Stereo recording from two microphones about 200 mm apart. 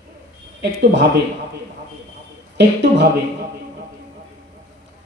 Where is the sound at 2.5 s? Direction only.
60° right (ahead or behind).